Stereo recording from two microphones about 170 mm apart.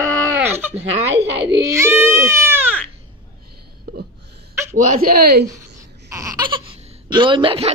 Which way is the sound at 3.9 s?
65° right (ahead or behind).